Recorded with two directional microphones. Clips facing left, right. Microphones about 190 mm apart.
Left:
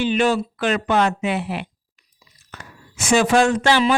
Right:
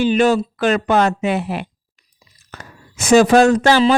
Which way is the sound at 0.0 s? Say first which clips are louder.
Right 4 dB; 40° right (ahead or behind).